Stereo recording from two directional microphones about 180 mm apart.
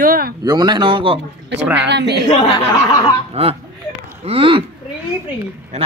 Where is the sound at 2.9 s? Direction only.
20° left (ahead or behind).